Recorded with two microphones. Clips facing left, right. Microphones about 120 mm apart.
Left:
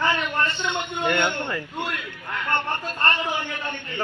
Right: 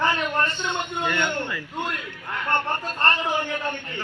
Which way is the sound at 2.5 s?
40° right (ahead or behind).